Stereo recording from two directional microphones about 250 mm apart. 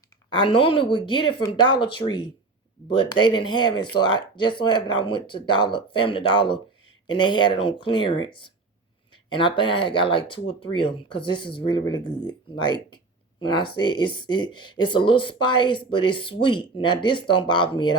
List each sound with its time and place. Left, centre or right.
0.3 s speech: centre